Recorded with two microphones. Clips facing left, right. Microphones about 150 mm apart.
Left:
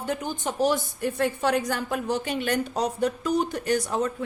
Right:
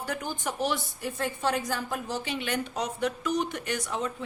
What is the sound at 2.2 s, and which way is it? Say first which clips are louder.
Speech: left 5 dB; 45° left (ahead or behind).